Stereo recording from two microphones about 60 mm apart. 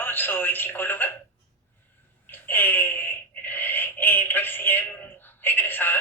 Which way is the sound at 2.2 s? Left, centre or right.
Left.